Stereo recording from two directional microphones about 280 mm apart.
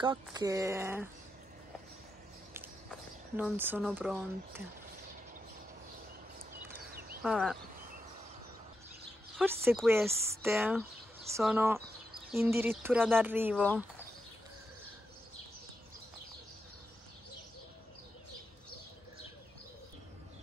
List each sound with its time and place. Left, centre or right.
0.0 s speech: centre
2.9 s speech: centre
6.9 s a sound: right
7.2 s speech: centre
9.3 s speech: centre